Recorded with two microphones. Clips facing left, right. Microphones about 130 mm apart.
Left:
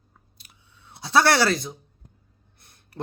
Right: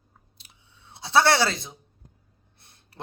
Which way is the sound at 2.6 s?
25° right (ahead or behind).